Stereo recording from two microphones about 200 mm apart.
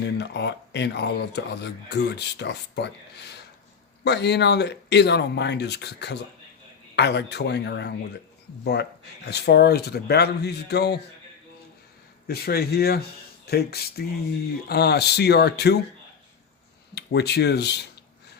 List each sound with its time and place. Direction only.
0.0 s speech: 60° left (ahead or behind)
4.0 s speech: 55° left (ahead or behind)
12.3 s speech: 50° left (ahead or behind)
16.9 s speech: 55° left (ahead or behind)